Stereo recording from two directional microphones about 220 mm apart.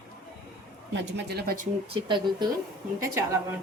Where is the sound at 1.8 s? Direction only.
25° right (ahead or behind).